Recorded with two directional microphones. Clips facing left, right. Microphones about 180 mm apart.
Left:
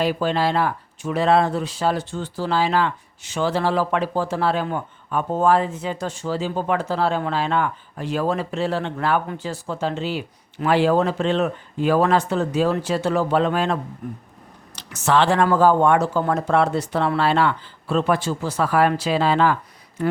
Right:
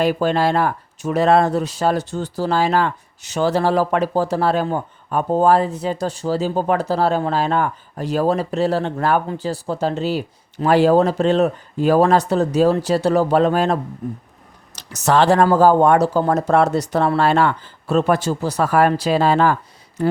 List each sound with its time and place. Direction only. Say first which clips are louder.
0.0 s speech: right 3 dB; 45° right (ahead or behind)
14.8 s speech: right 3 dB; 40° right (ahead or behind)